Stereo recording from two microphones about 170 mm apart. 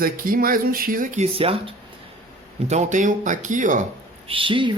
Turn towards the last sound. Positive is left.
turn(degrees=-30)  # may be behind; listen again after turning